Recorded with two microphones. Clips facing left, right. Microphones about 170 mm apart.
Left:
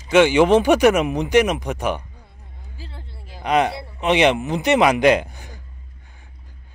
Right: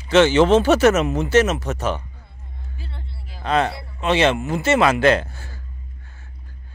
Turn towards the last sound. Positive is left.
turn(degrees=15)  # may be behind; listen again after turning